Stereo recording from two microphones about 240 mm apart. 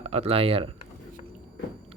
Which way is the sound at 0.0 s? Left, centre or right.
Right.